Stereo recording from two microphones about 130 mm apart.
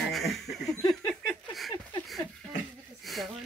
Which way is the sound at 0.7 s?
30° left (ahead or behind).